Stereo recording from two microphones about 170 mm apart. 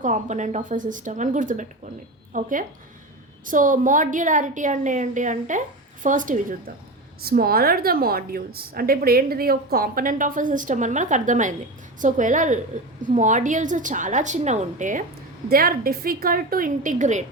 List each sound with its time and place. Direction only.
0.0 s a woman's voice: 45° right (ahead or behind)
7.2 s a woman's voice: 65° right (ahead or behind); by 15.0 s 50° right (ahead or behind)
15.4 s a woman's voice: 60° right (ahead or behind)